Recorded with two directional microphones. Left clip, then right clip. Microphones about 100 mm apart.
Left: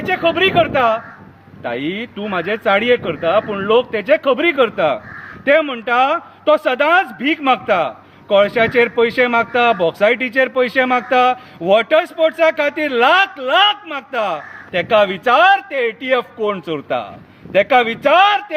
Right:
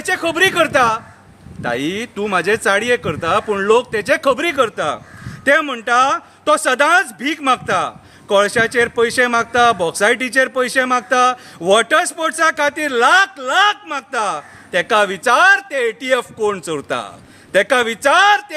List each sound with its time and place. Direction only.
0.1 s speech: 35° right (ahead or behind)